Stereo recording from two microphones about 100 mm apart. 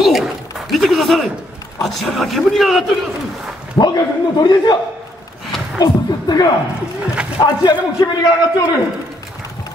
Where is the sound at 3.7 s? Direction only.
45° left (ahead or behind).